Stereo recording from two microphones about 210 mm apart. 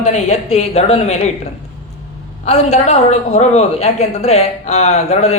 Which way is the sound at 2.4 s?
30° left (ahead or behind).